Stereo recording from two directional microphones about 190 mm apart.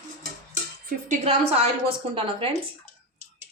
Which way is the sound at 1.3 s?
30° right (ahead or behind).